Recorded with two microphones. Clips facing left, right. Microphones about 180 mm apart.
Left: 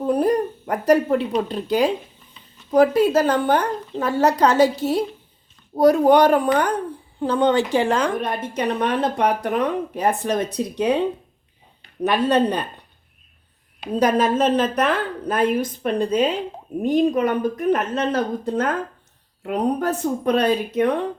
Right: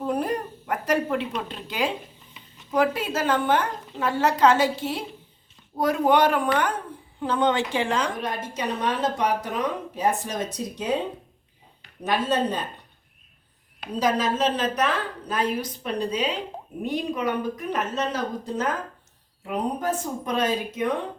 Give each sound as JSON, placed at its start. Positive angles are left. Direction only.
{"t": 0.1, "sound": "a woman's voice", "side_deg": 35}
{"t": 12.0, "sound": "a woman's voice", "side_deg": 65}
{"t": 14.0, "sound": "a woman's voice", "side_deg": 55}